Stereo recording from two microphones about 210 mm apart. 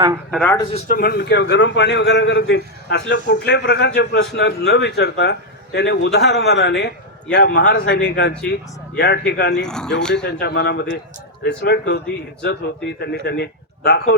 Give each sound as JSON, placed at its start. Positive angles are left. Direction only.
{"t": 0.3, "sound": "speech", "side_deg": 5}
{"t": 0.7, "sound": "a man's voice", "side_deg": 40}
{"t": 9.6, "sound": "speech", "side_deg": 5}
{"t": 10.4, "sound": "speech", "side_deg": 55}
{"t": 13.0, "sound": "a man's voice", "side_deg": 50}